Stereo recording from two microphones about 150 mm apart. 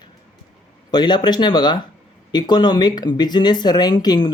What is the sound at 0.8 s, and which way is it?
Speech, 30° left (ahead or behind).